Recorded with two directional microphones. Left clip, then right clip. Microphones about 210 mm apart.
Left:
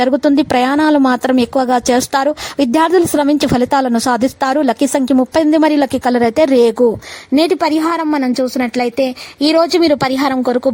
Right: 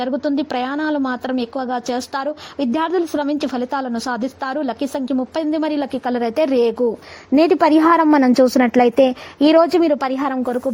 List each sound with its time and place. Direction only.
0.0 s a woman's voice: 40° left (ahead or behind)
7.3 s a woman's voice: 20° left (ahead or behind); by 10.7 s 35° left (ahead or behind)